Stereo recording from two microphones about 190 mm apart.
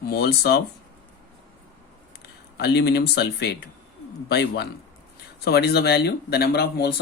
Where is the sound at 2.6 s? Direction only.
60° left (ahead or behind).